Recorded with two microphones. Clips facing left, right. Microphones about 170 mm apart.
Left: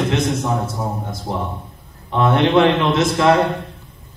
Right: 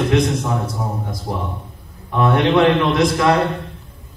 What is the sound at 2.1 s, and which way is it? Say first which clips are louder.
A man's voice: even; 25° left (ahead or behind).